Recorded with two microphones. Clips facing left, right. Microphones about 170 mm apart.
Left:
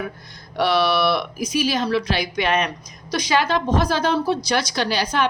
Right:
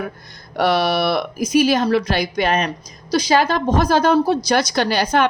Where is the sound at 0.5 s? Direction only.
45° right (ahead or behind).